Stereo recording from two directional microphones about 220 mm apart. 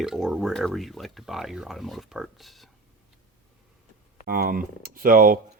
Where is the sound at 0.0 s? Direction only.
Centre (ahead or behind).